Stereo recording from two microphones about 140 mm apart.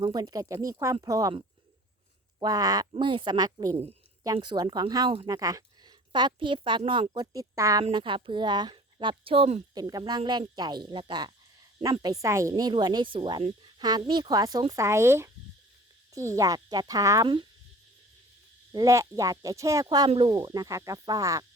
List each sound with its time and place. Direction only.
0.0 s a woman's voice: 30° right (ahead or behind)
2.4 s a woman's voice: 30° right (ahead or behind)
7.9 s speech: 35° right (ahead or behind)
9.7 s a woman's voice: 30° right (ahead or behind)
18.7 s a woman's voice: 25° right (ahead or behind)